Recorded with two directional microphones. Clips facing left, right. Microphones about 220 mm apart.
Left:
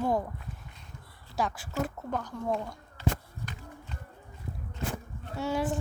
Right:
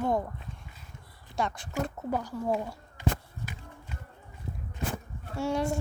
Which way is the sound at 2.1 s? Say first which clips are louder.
Right 5 dB; 10° right (ahead or behind).